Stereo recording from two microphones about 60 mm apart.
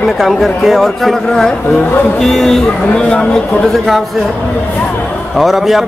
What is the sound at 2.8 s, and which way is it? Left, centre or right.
Speech, centre.